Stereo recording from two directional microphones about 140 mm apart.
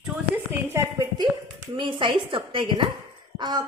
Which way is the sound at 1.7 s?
35° right (ahead or behind).